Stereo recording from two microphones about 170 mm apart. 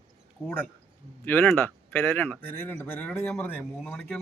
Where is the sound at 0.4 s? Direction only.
10° left (ahead or behind).